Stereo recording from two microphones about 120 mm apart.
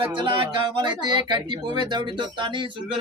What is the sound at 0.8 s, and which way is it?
Speech, 40° right (ahead or behind).